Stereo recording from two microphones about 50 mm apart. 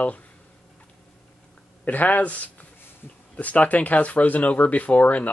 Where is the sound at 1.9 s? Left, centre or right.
Left.